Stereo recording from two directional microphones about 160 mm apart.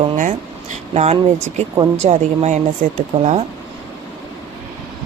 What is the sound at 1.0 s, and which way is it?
Speech, 45° right (ahead or behind).